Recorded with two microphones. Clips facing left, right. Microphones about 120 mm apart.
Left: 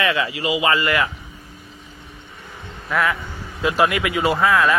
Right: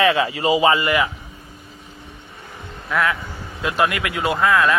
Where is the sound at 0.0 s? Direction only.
30° right (ahead or behind).